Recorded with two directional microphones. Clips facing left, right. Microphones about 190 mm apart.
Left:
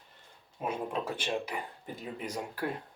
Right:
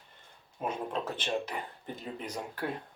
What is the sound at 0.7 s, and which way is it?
Speech, 10° left (ahead or behind).